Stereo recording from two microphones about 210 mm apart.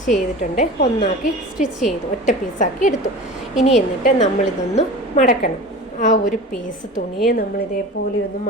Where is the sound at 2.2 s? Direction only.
35° left (ahead or behind).